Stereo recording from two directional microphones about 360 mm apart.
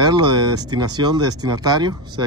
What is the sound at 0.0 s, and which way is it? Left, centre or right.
Speech, centre.